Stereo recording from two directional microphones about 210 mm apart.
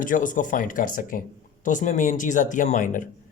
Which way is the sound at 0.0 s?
40° left (ahead or behind).